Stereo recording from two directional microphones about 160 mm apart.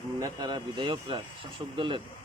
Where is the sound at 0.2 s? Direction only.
25° right (ahead or behind).